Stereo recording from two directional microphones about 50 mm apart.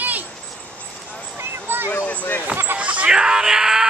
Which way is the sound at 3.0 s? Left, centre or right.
Centre.